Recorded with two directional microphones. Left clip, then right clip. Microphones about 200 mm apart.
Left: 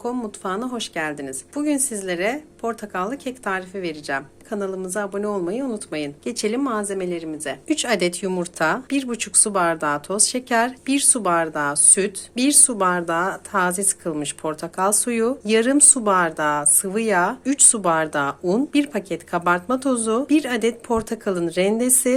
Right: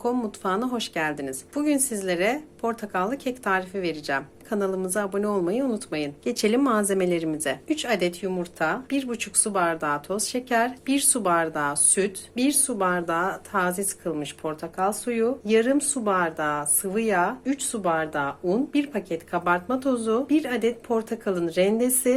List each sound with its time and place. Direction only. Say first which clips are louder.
0.0 s a woman's voice: right 1 dB; centre (ahead or behind); by 7.3 s 20° right (ahead or behind)
7.7 s speech: left 6 dB; 20° left (ahead or behind)